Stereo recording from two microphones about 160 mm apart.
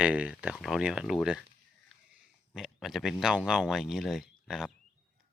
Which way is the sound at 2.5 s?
Centre (ahead or behind).